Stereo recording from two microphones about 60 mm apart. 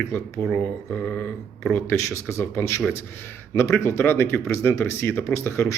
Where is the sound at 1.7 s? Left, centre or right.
Left.